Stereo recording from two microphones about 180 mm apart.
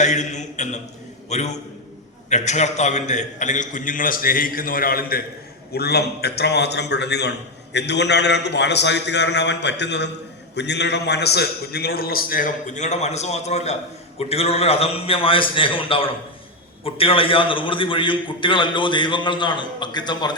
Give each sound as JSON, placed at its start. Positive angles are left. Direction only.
{"t": 0.0, "sound": "a man's voice", "side_deg": 40}